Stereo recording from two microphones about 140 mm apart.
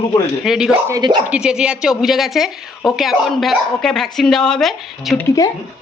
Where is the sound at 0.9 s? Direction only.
30° right (ahead or behind).